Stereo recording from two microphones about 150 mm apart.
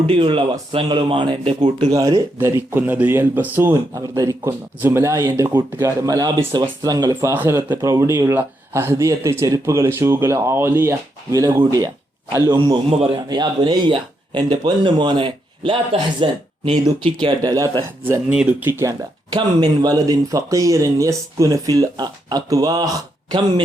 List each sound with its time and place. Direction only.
0.1 s speech: 35° right (ahead or behind)
12.9 s speech: 40° right (ahead or behind)
13.2 s speech: 30° right (ahead or behind)
18.0 s speech: 10° right (ahead or behind)
18.8 s speech: 25° right (ahead or behind)